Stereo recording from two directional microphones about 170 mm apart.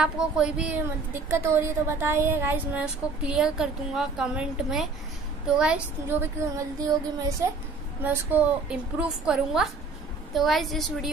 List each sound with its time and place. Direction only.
0.0 s a woman's voice: 5° right (ahead or behind)
1.4 s a woman's voice: 15° right (ahead or behind); by 11.1 s centre (ahead or behind)